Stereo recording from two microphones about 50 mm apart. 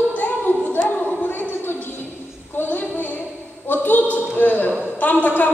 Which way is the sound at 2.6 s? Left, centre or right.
Left.